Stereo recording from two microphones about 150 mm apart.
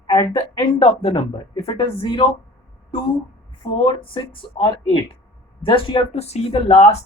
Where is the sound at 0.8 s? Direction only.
40° left (ahead or behind).